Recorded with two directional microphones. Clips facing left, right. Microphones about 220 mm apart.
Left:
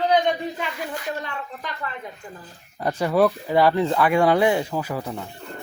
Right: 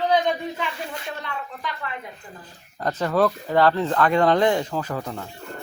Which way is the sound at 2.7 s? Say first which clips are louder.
Left 2 dB; 10° left (ahead or behind).